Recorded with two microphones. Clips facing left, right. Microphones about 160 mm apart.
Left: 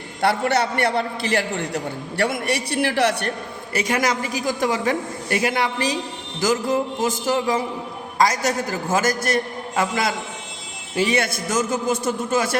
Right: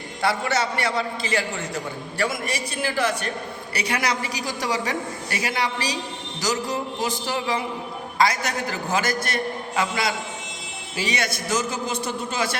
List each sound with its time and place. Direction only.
0.2 s a man's voice: 60° left (ahead or behind)
3.8 s a woman's voice: 45° left (ahead or behind)